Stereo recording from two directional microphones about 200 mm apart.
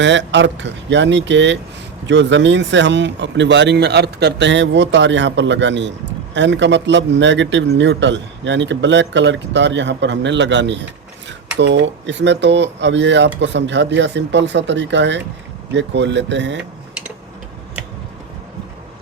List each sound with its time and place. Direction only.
0.0 s a man's voice: 65° right (ahead or behind)